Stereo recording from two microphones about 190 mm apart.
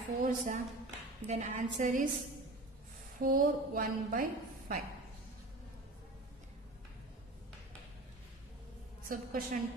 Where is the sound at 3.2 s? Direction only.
45° right (ahead or behind).